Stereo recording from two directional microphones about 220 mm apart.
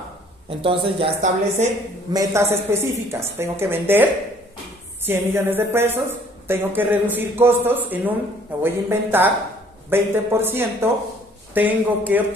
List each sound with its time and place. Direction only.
0.5 s speech: 25° right (ahead or behind)
2.1 s a woman's voice: 10° right (ahead or behind)